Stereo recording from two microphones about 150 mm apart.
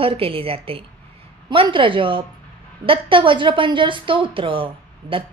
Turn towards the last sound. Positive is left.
turn(degrees=-35)  # may be behind; listen again after turning